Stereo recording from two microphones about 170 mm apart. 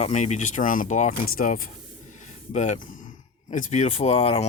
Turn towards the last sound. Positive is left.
turn(degrees=35)  # may be behind; listen again after turning